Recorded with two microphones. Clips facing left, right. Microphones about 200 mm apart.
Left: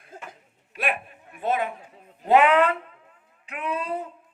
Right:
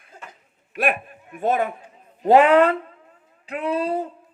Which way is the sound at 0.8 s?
45° right (ahead or behind).